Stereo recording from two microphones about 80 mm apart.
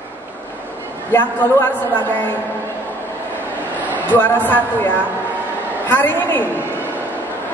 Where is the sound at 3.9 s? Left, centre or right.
Left.